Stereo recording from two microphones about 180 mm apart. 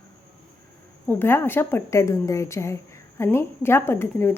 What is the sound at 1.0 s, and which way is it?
Speech, 10° left (ahead or behind).